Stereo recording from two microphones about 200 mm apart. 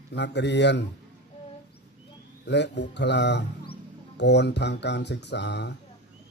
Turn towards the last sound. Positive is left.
turn(degrees=60)  # may be behind; listen again after turning